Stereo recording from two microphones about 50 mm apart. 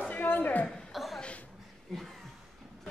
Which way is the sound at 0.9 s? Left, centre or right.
Centre.